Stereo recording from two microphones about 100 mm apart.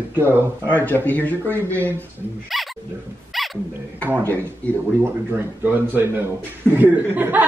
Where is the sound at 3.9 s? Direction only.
20° right (ahead or behind).